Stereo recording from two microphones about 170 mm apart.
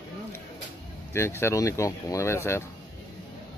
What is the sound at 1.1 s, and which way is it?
Speech, 15° left (ahead or behind).